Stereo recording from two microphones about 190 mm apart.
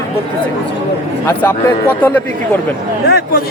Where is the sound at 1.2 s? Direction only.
10° left (ahead or behind).